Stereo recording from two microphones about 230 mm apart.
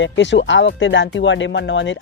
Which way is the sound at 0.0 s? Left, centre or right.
Left.